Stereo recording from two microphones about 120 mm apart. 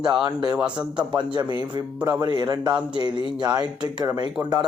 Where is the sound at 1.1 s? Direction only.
40° right (ahead or behind).